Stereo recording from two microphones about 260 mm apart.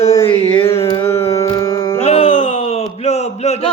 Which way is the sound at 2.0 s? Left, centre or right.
Left.